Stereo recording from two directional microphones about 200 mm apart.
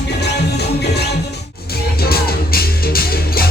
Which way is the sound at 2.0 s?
50° left (ahead or behind).